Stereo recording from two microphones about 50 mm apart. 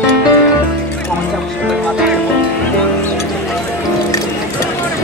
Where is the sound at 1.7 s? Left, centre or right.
Centre.